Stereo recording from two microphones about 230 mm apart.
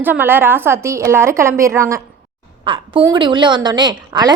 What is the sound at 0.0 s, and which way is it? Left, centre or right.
A woman's voice, centre.